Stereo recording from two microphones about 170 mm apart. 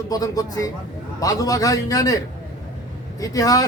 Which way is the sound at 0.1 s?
20° left (ahead or behind).